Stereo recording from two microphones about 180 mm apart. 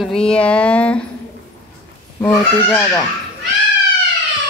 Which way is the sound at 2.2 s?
5° left (ahead or behind).